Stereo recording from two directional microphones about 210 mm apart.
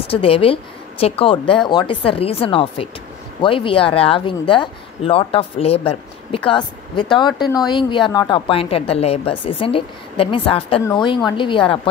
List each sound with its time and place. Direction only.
0.1 s speech: 25° left (ahead or behind)